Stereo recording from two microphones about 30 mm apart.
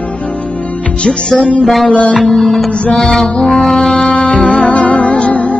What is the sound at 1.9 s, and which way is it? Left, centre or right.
Music, left.